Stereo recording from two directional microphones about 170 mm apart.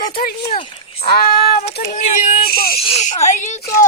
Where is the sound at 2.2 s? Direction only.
40° left (ahead or behind).